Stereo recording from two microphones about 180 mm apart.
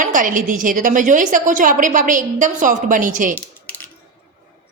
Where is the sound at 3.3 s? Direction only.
10° left (ahead or behind).